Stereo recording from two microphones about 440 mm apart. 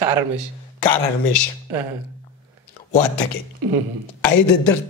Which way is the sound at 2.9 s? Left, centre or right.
Left.